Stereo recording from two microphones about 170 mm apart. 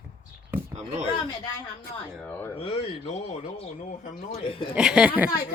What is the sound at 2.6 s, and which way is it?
Speech, 35° left (ahead or behind).